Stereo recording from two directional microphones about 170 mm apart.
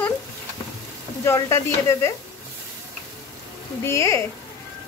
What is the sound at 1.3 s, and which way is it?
Speech, 15° left (ahead or behind).